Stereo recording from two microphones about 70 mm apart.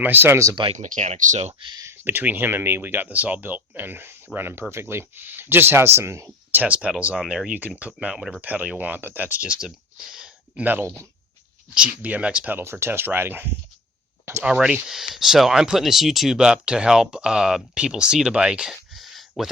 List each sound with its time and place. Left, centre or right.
0.0 s speech: right
2.0 s speech: right
6.6 s speech: centre
8.4 s speech: right
10.6 s speech: right
11.7 s speech: centre
12.5 s speech: right
14.4 s speech: centre
18.7 s a sound: centre